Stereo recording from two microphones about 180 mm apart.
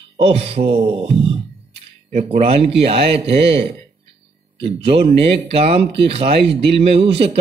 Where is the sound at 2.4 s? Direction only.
35° right (ahead or behind).